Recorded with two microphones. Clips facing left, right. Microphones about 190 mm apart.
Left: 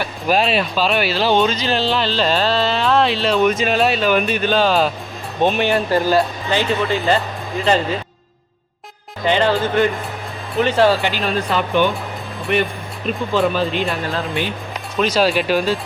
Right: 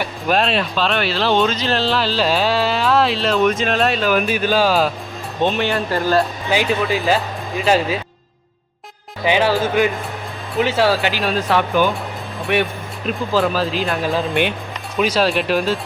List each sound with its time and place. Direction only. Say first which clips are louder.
0.3 s speech: left 1 dB; centre (ahead or behind)
5.4 s speech: left 2 dB; 15° left (ahead or behind)
6.7 s speech: left 1 dB; centre (ahead or behind)
9.2 s speech: even; 10° right (ahead or behind)
13.1 s speech: even; centre (ahead or behind)